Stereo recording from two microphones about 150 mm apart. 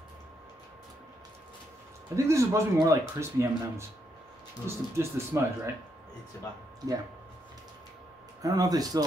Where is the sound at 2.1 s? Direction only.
20° right (ahead or behind).